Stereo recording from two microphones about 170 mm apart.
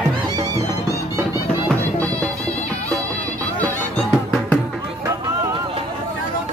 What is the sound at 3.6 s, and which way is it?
Music, 10° left (ahead or behind).